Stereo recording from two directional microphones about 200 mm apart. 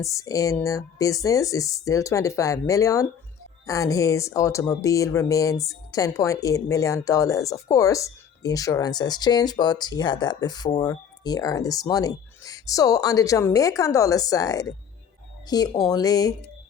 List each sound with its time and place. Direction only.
0.0 s speech: 15° left (ahead or behind)